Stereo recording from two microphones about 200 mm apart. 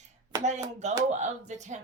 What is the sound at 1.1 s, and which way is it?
Speech, 35° right (ahead or behind).